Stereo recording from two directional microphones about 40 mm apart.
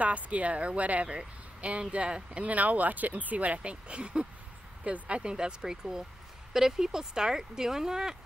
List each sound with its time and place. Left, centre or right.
0.0 s speech: right; by 8.2 s centre